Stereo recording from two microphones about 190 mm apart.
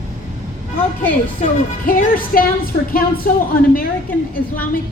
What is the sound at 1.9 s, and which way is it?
A woman's voice, 50° left (ahead or behind).